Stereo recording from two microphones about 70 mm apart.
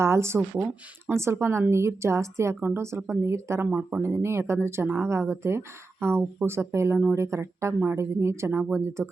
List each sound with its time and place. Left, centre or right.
0.0 s speech: right
0.5 s speech: right
1.1 s speech: right
3.7 s speech: right
4.0 s speech: right